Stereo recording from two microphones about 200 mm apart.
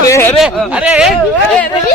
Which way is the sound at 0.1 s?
10° left (ahead or behind).